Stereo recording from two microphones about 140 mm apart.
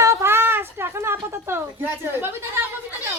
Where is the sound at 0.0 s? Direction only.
20° right (ahead or behind).